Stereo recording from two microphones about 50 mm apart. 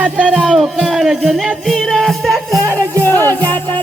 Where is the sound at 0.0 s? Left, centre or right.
Right.